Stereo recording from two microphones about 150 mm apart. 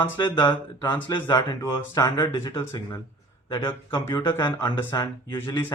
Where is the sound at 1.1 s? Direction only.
30° left (ahead or behind).